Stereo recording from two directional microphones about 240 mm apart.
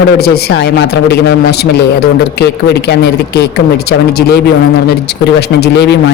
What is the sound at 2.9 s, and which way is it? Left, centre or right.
Speech, left.